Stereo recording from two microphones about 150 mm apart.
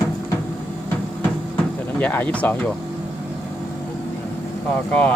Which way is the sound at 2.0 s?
10° left (ahead or behind).